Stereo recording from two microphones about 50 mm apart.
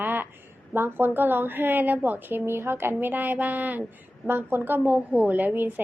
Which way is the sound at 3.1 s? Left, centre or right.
Right.